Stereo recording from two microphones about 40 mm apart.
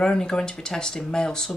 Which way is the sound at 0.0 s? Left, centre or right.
Centre.